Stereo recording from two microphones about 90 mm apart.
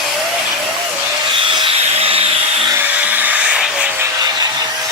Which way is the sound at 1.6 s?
90° right.